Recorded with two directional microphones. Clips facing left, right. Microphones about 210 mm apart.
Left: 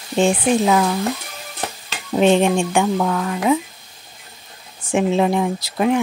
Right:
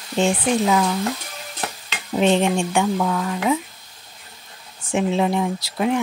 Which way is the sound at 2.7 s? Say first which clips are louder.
Left 2 dB; 55° left (ahead or behind).